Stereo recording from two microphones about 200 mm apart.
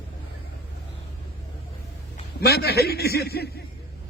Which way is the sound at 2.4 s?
50° left (ahead or behind).